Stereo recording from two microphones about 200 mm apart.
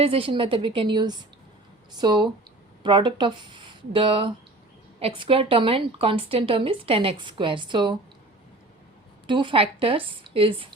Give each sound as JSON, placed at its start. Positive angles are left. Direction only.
{"t": 0.0, "sound": "a woman's voice", "side_deg": -30}
{"t": 9.2, "sound": "a woman's voice", "side_deg": -25}